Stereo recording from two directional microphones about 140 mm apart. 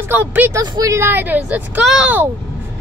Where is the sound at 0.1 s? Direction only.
15° right (ahead or behind).